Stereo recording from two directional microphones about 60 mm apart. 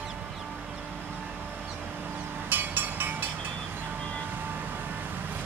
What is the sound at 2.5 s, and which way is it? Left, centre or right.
Train, right.